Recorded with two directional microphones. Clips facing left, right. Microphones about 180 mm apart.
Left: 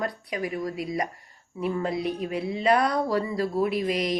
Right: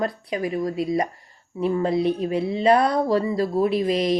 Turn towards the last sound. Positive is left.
turn(degrees=-30)  # may be behind; listen again after turning